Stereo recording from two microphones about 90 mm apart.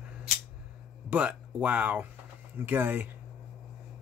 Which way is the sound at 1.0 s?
15° right (ahead or behind).